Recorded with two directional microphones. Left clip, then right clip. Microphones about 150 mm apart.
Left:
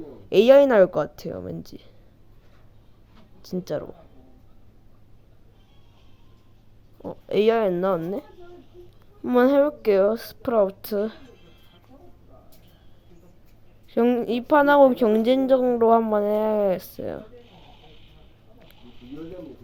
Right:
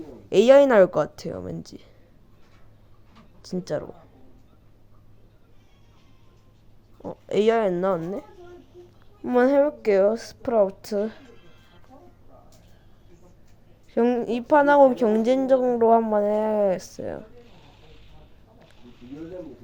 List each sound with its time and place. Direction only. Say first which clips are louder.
0.3 s speech: even; 5° left (ahead or behind)
3.4 s speech: even; centre (ahead or behind)
7.0 s speech: left 1 dB; 5° left (ahead or behind)
11.2 s music: even; 40° left (ahead or behind)
13.9 s speech: left 1 dB; 15° left (ahead or behind)
17.4 s a sound: left 2 dB; 45° left (ahead or behind)